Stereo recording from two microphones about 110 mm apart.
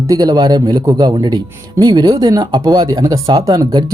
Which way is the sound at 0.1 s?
35° right (ahead or behind).